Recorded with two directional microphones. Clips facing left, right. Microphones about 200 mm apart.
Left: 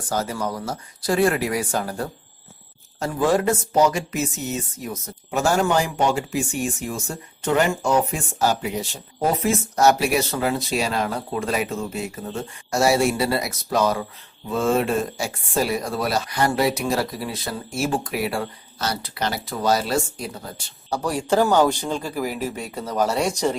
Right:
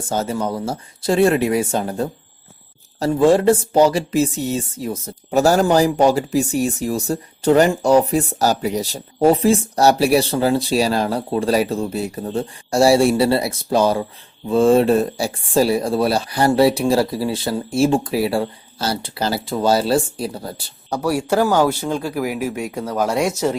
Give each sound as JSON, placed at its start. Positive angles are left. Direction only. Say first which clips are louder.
{"t": 0.1, "sound": "speech", "louder": "right 4 dB", "side_deg": -25}
{"t": 20.9, "sound": "speech", "louder": "right 3 dB", "side_deg": -10}